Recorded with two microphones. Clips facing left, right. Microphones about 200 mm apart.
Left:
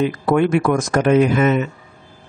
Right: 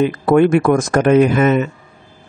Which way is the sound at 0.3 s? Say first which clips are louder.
Right 5 dB; 50° right (ahead or behind).